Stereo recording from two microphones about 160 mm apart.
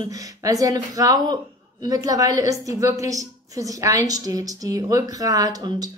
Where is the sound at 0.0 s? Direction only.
20° right (ahead or behind).